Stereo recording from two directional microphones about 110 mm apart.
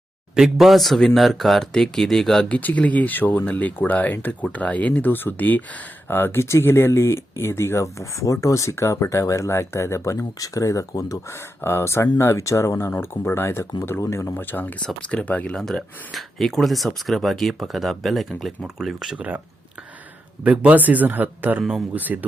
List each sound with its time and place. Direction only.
0.3 s speech: 5° right (ahead or behind); by 15.5 s 15° left (ahead or behind)
15.5 s speech: 5° left (ahead or behind); by 19.4 s 10° right (ahead or behind)
20.4 s speech: 10° right (ahead or behind)